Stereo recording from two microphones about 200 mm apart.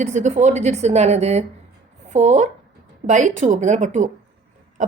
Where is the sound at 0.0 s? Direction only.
35° right (ahead or behind).